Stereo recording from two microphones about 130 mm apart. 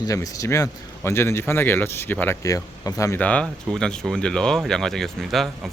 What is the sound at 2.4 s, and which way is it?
Speech, 25° left (ahead or behind).